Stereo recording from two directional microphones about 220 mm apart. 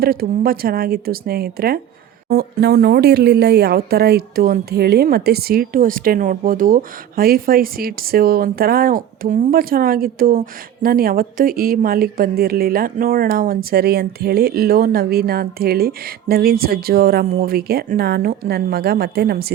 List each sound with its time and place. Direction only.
0.0 s speech: 45° right (ahead or behind)